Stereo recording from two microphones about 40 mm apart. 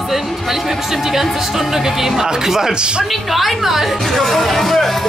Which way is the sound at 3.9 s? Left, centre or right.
Centre.